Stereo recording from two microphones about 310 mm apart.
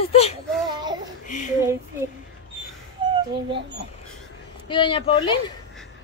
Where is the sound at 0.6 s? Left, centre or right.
Centre.